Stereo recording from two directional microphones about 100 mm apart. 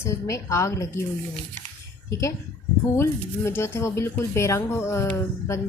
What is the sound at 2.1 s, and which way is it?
Speech, 30° left (ahead or behind).